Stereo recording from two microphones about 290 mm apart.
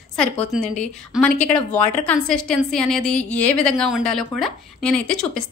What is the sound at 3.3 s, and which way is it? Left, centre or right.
A woman's voice, centre.